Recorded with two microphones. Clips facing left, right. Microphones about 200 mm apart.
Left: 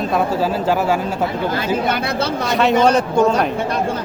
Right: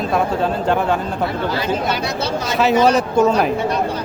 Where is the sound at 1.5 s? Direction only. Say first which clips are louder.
Left 1 dB; 55° left (ahead or behind).